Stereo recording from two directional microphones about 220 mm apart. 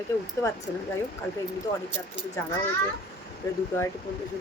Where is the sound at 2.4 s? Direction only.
15° left (ahead or behind).